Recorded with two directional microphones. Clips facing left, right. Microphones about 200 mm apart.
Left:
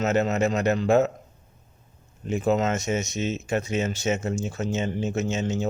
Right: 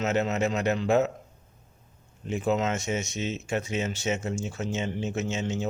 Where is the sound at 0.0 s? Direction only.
45° left (ahead or behind).